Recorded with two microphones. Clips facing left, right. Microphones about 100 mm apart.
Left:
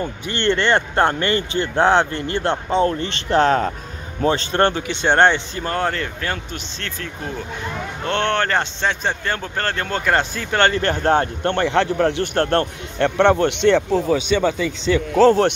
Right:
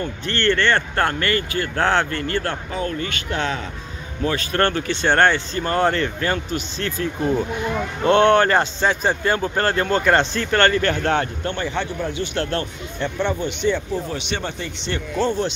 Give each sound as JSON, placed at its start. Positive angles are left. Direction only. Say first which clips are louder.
{"t": 0.0, "sound": "speech", "louder": "even", "side_deg": 15}
{"t": 4.2, "sound": "speech", "louder": "left 3 dB", "side_deg": 30}
{"t": 5.6, "sound": "a man's voice", "louder": "right 3 dB", "side_deg": 0}
{"t": 11.4, "sound": "speech", "louder": "left 6 dB", "side_deg": 70}
{"t": 12.4, "sound": "speech", "louder": "left 5 dB", "side_deg": 55}
{"t": 13.0, "sound": "speech", "louder": "left 8 dB", "side_deg": 80}
{"t": 15.1, "sound": "speech", "louder": "left 8 dB", "side_deg": 85}